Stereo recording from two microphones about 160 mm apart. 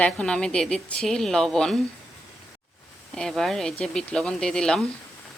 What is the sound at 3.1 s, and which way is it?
A woman's voice, 5° left (ahead or behind).